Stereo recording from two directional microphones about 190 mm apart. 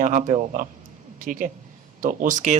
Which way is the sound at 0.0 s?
45° right (ahead or behind).